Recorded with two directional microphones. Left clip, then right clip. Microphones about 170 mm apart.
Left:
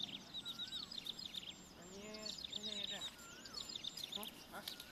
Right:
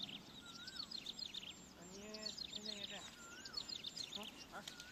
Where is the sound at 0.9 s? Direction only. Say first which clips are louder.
Left 1 dB; 35° left (ahead or behind).